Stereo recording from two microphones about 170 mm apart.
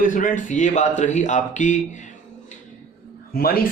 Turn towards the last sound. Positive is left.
turn(degrees=60)  # may be behind; listen again after turning